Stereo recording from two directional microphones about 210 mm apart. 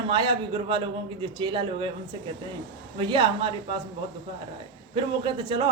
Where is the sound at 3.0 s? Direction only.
25° right (ahead or behind).